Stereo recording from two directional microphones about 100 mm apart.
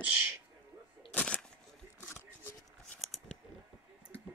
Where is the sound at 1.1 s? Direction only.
15° left (ahead or behind).